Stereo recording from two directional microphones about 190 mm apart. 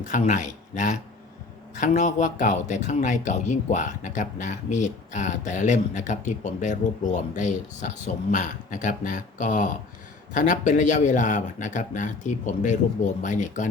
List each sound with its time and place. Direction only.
0.0 s speech: 40° left (ahead or behind)